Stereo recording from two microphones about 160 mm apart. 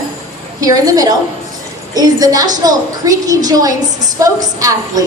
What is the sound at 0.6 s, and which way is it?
A woman's voice, 20° right (ahead or behind).